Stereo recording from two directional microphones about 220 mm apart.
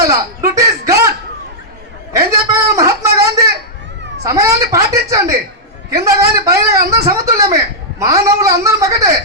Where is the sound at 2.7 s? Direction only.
15° right (ahead or behind).